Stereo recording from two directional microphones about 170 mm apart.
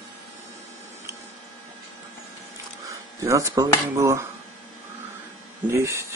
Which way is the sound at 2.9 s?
20° right (ahead or behind).